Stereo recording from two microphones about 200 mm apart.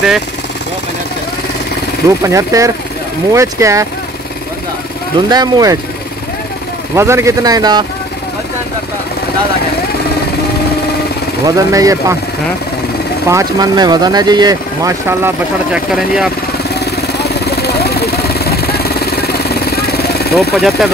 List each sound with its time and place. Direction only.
2.0 s speech: 15° right (ahead or behind)
5.3 s speech: 20° right (ahead or behind)
7.0 s speech: 15° right (ahead or behind)
11.4 s speech: 15° right (ahead or behind)
13.3 s speech: 15° right (ahead or behind)
17.2 s vehicle: 55° left (ahead or behind)
20.3 s speech: centre (ahead or behind)